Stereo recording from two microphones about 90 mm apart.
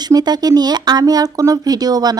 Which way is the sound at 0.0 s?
50° right (ahead or behind).